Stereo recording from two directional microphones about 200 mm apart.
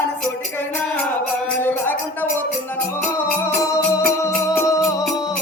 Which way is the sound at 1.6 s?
10° left (ahead or behind).